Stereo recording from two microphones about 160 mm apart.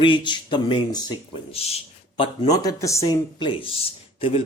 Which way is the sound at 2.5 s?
20° left (ahead or behind).